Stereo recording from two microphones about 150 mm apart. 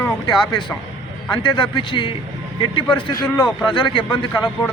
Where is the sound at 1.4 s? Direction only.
30° left (ahead or behind).